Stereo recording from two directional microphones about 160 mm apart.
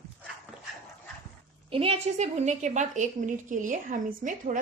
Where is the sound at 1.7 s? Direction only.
35° right (ahead or behind).